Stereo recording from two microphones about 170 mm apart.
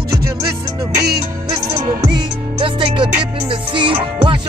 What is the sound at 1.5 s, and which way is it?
Music, 25° right (ahead or behind).